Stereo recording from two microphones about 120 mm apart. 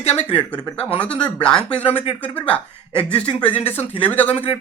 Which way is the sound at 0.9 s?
10° left (ahead or behind).